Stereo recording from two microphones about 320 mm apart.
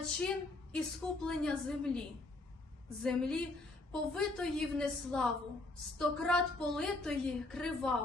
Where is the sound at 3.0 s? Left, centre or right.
Centre.